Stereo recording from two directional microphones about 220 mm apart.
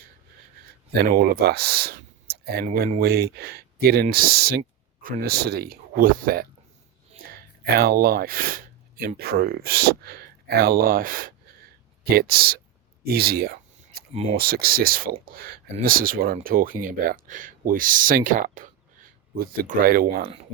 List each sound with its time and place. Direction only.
1.0 s speech: 45° right (ahead or behind)
14.1 s speech: 25° right (ahead or behind)
14.3 s speech: 45° right (ahead or behind)